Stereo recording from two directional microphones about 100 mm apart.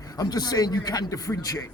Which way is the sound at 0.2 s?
40° left (ahead or behind).